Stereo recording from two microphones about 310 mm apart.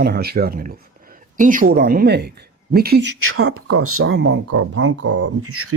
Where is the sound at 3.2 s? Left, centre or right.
Right.